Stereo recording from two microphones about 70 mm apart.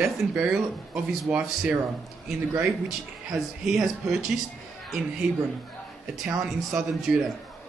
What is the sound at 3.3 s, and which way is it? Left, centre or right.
Speech, centre.